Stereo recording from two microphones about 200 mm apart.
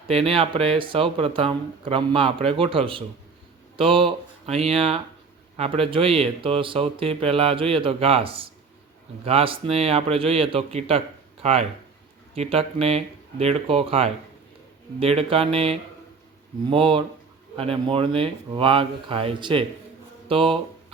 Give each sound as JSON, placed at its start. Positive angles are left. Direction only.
{"t": 0.1, "sound": "a man's voice", "side_deg": -30}